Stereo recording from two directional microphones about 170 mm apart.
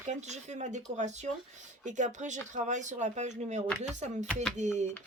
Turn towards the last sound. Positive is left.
turn(degrees=-45)  # may be behind; listen again after turning